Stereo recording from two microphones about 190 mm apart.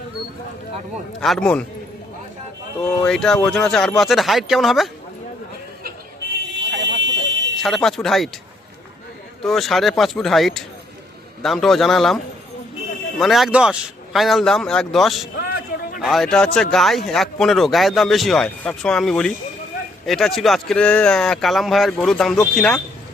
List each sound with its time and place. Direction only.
1.2 s speech: 5° left (ahead or behind)
3.0 s speech: 5° left (ahead or behind)
6.7 s buzzer: 70° right (ahead or behind)
7.6 s speech: centre (ahead or behind)
9.4 s speech: centre (ahead or behind)
15.4 s a sound: 55° left (ahead or behind)
16.0 s a man's voice: centre (ahead or behind)